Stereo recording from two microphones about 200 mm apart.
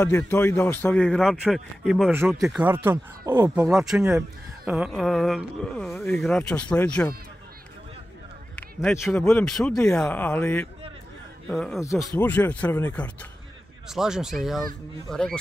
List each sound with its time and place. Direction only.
0.2 s speech: 10° left (ahead or behind)
9.1 s speech: 5° left (ahead or behind)
11.8 s speech: 15° left (ahead or behind)